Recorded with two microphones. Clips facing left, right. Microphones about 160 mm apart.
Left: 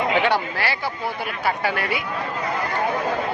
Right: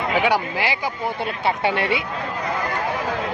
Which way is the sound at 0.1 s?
10° right (ahead or behind).